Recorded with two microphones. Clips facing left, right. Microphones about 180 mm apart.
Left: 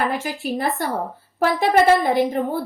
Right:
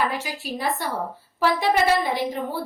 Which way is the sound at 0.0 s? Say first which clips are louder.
Left 3 dB; 50° left (ahead or behind).